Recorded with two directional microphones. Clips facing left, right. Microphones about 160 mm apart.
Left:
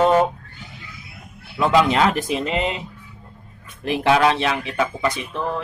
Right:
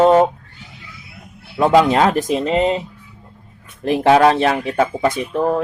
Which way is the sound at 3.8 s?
40° right (ahead or behind).